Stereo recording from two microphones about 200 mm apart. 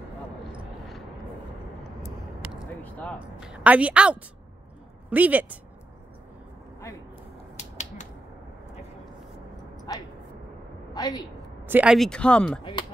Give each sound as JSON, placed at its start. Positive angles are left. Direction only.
{"t": 2.5, "sound": "a sound", "side_deg": 5}
{"t": 3.3, "sound": "speech", "side_deg": -5}
{"t": 7.5, "sound": "finger snapping", "side_deg": 35}
{"t": 9.9, "sound": "a woman's voice", "side_deg": 20}
{"t": 11.6, "sound": "speech", "side_deg": -5}